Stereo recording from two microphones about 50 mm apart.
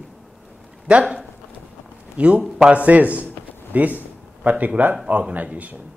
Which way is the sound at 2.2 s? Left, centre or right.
Right.